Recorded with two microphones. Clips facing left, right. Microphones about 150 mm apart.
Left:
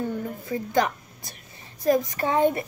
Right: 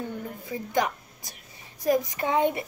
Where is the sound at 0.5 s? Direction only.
15° right (ahead or behind).